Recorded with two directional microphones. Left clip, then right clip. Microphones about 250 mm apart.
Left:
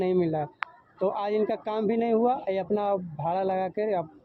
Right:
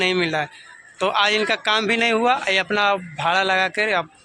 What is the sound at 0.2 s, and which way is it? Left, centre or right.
Speech, right.